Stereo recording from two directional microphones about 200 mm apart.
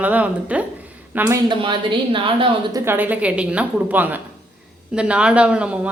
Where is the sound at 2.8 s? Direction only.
10° right (ahead or behind).